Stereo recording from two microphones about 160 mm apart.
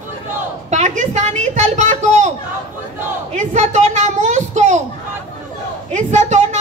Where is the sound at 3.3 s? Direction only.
45° right (ahead or behind).